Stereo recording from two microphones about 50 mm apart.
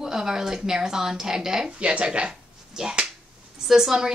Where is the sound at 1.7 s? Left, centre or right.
Right.